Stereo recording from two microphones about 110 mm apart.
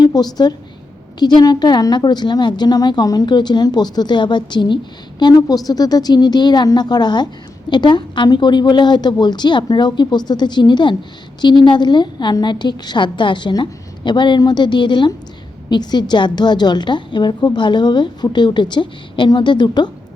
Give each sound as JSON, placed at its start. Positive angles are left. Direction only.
{"t": 0.0, "sound": "a woman's voice", "side_deg": 35}